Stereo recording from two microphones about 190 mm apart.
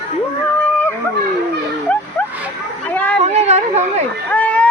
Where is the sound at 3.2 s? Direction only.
35° right (ahead or behind).